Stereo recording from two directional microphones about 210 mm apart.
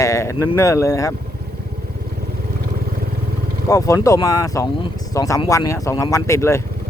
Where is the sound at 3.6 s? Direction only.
15° left (ahead or behind).